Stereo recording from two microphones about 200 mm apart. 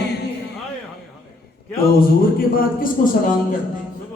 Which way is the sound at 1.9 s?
45° left (ahead or behind).